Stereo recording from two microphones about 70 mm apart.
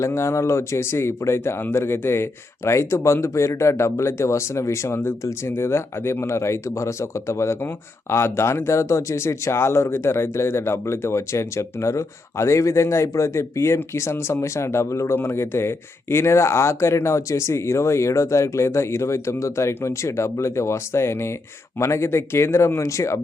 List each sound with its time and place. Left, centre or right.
0.0 s speech: left